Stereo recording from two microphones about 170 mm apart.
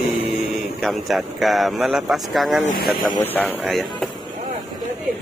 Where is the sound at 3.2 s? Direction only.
10° left (ahead or behind).